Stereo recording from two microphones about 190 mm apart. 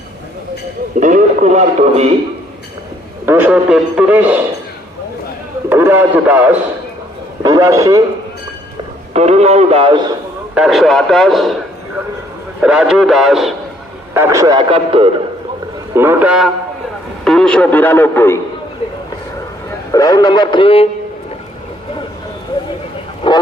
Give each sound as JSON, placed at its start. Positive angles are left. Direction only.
{"t": 0.9, "sound": "a man's voice", "side_deg": -40}
{"t": 3.2, "sound": "a man's voice", "side_deg": -10}
{"t": 5.6, "sound": "a man's voice", "side_deg": -10}
{"t": 9.1, "sound": "a man's voice", "side_deg": -35}
{"t": 10.5, "sound": "a man's voice", "side_deg": 0}
{"t": 14.1, "sound": "a man's voice", "side_deg": -15}
{"t": 16.0, "sound": "a man's voice", "side_deg": -10}
{"t": 19.9, "sound": "a man's voice", "side_deg": 20}
{"t": 23.2, "sound": "a sound", "side_deg": 25}